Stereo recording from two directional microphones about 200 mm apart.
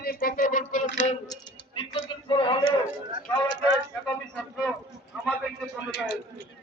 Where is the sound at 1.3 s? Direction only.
25° left (ahead or behind).